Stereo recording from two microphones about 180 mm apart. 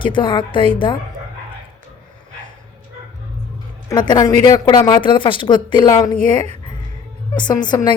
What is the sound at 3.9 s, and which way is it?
A woman's voice, 25° left (ahead or behind).